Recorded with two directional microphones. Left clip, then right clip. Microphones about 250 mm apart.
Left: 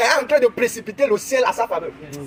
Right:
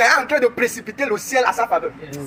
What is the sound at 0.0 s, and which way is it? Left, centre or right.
A man's voice, left.